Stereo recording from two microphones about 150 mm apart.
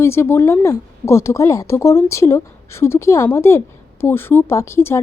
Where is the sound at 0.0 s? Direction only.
15° left (ahead or behind).